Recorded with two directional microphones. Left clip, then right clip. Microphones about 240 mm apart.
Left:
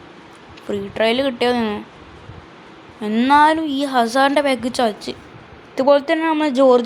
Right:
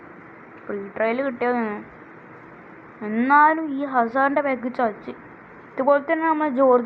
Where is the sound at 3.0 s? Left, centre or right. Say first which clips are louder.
Left 3 dB; left.